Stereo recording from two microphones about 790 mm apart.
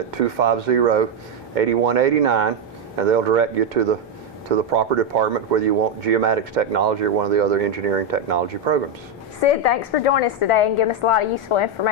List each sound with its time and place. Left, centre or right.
0.1 s speech: right
9.4 s a woman's voice: left